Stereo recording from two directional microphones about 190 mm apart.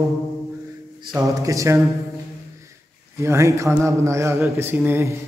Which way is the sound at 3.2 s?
15° right (ahead or behind).